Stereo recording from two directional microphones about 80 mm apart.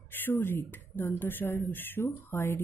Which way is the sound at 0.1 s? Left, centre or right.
Left.